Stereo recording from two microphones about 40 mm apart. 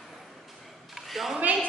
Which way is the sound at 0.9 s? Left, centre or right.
Centre.